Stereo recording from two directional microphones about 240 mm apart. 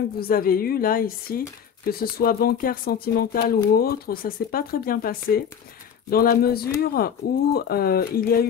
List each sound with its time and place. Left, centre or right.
0.2 s speech: left